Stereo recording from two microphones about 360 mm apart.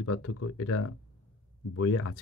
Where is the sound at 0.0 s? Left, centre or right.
Left.